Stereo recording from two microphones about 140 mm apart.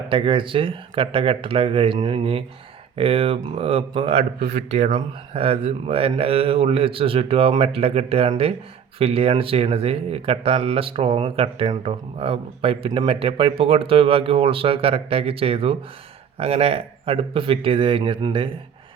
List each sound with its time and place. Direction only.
0.1 s speech: 35° right (ahead or behind)